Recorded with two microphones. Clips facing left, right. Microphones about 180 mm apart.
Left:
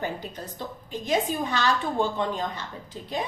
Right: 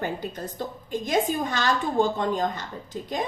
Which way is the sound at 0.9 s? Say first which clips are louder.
Right 2 dB; 45° right (ahead or behind).